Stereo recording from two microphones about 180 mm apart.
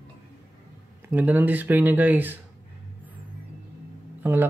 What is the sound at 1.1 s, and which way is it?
Speech, 10° right (ahead or behind).